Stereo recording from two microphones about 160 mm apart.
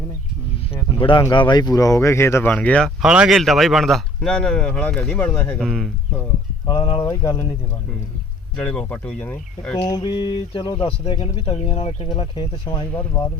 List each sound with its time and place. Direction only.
0.9 s speech: 30° left (ahead or behind); by 5.9 s centre (ahead or behind)
6.7 s speech: 30° left (ahead or behind)
8.5 s speech: 5° left (ahead or behind)
9.9 s speech: 30° left (ahead or behind)